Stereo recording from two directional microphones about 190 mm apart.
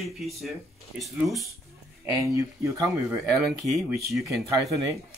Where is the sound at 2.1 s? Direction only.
15° right (ahead or behind).